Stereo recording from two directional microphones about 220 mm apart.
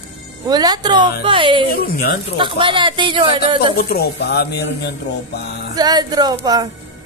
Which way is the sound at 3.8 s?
45° left (ahead or behind).